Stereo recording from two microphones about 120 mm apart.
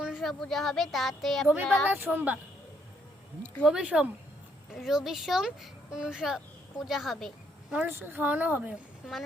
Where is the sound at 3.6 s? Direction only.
5° right (ahead or behind).